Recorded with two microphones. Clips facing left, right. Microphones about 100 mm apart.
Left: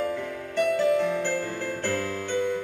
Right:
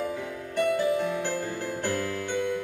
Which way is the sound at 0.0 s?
10° right (ahead or behind).